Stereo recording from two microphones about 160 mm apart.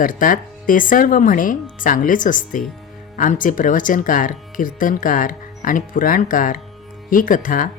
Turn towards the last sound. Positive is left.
turn(degrees=55)  # may be behind; listen again after turning